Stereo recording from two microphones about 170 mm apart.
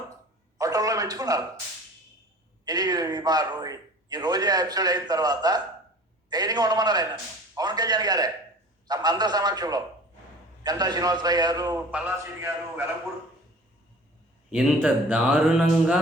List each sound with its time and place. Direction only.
0.6 s a sound: 20° right (ahead or behind)
2.6 s a man's voice: 25° right (ahead or behind)
11.9 s a man's voice: 10° right (ahead or behind)
14.5 s speech: 5° right (ahead or behind)